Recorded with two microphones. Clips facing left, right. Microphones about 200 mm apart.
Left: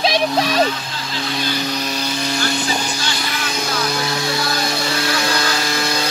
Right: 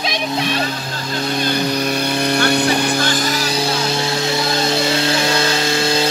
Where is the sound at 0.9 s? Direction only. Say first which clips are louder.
Right 4 dB; 45° right (ahead or behind); by 6.0 s 25° right (ahead or behind).